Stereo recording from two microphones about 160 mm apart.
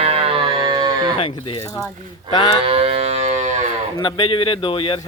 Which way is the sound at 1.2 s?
30° left (ahead or behind).